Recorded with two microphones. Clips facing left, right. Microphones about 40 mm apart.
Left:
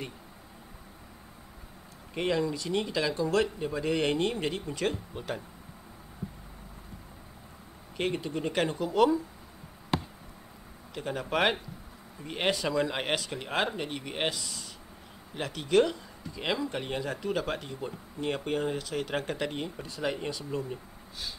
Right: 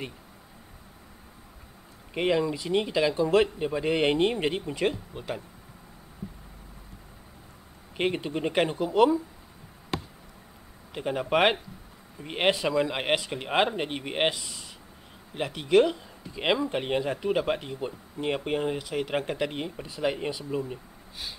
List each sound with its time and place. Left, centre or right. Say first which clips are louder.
2.1 s speech: right 3 dB; right
5.1 s speech: right 1 dB; centre
8.0 s speech: right 3 dB; right; by 9.2 s centre
11.0 s speech: right 5 dB; right
16.3 s speech: right 5 dB; right